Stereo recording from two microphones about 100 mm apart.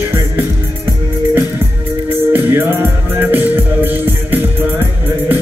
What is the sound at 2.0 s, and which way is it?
Music, 20° right (ahead or behind).